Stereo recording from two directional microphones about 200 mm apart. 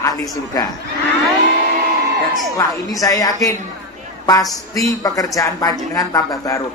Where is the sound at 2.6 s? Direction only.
15° left (ahead or behind).